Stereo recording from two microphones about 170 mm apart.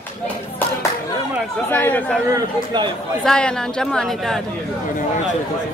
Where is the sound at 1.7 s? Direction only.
10° left (ahead or behind).